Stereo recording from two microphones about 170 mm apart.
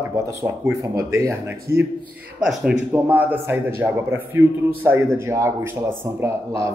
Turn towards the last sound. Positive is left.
turn(degrees=-15)  # may be behind; listen again after turning